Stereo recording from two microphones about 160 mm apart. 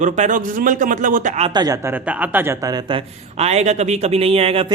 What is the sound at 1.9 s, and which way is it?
A man's voice, 10° right (ahead or behind).